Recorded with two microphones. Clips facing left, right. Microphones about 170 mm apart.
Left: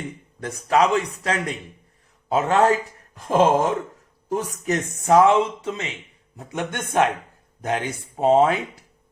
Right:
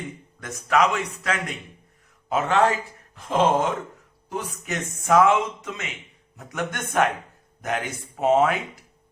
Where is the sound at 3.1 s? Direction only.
45° left (ahead or behind).